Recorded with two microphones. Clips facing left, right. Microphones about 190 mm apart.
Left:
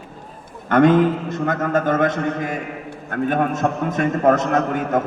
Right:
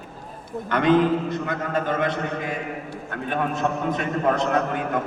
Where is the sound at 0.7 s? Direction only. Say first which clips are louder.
Left 4 dB; 50° left (ahead or behind).